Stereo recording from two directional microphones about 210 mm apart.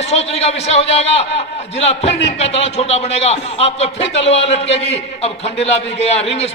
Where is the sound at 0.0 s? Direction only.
30° left (ahead or behind).